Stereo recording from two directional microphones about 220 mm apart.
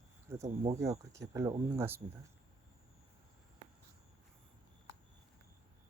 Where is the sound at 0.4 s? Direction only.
30° right (ahead or behind).